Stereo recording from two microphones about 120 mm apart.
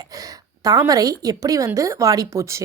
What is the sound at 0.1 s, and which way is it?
A woman's voice, 30° right (ahead or behind).